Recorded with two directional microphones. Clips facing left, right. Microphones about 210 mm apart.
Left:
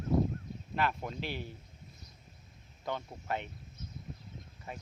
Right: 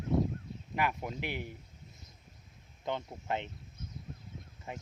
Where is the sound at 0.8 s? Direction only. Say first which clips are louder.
Even; 15° right (ahead or behind).